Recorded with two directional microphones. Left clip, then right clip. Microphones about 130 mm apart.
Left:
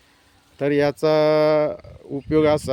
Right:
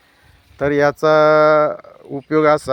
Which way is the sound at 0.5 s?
10° left (ahead or behind).